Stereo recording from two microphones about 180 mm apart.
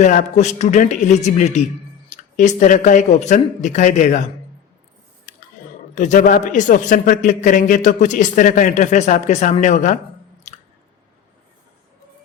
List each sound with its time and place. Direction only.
0.0 s speech: 45° left (ahead or behind)
5.9 s a man's voice: 45° left (ahead or behind)
10.5 s chewing: 40° left (ahead or behind)